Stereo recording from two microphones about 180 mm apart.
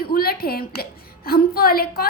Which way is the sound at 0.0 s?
60° left (ahead or behind).